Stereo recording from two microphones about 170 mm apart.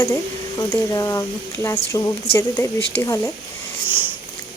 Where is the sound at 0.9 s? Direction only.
20° left (ahead or behind).